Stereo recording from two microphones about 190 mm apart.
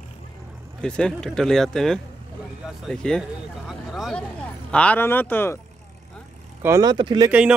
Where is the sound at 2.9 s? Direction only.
5° left (ahead or behind).